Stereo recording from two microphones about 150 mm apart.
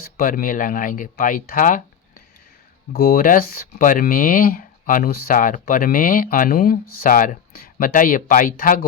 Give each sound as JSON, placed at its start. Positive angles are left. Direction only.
{"t": 0.2, "sound": "speech", "side_deg": 70}
{"t": 2.9, "sound": "speech", "side_deg": 80}